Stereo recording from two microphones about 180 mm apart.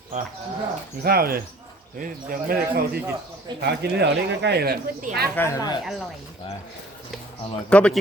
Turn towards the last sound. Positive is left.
turn(degrees=5)  # may be behind; listen again after turning